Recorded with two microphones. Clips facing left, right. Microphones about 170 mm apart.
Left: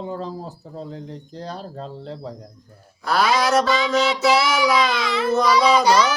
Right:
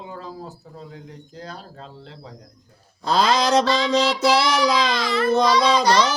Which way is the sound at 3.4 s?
20° right (ahead or behind).